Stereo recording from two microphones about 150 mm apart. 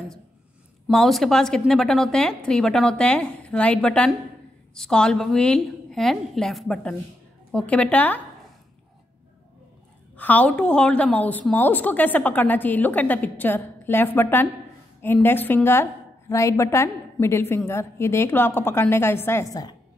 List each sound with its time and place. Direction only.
0.8 s a woman's voice: centre (ahead or behind)
10.1 s a woman's voice: 10° left (ahead or behind)